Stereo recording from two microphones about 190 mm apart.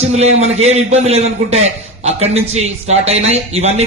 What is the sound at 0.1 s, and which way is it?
A man's voice, 35° right (ahead or behind).